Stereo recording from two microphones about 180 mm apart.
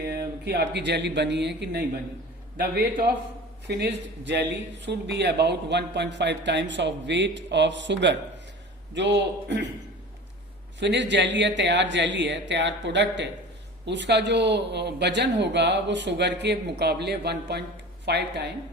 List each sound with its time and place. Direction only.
0.1 s speech: 60° right (ahead or behind)
2.6 s a man's voice: 60° right (ahead or behind)
3.7 s a man's voice: 70° right (ahead or behind)
10.8 s a man's voice: 75° right (ahead or behind)